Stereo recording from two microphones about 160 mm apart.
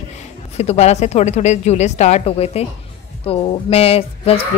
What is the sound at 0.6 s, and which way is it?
Speech, 40° left (ahead or behind).